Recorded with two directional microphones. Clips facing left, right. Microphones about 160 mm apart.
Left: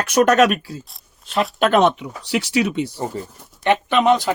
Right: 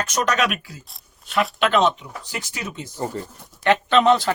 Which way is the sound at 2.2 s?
75° left (ahead or behind).